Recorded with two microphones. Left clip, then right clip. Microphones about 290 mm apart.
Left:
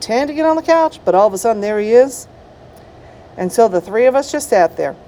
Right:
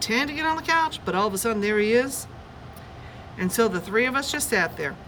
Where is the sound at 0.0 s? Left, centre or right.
Centre.